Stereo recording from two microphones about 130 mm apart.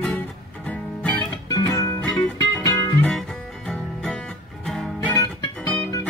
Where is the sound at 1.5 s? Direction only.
20° left (ahead or behind).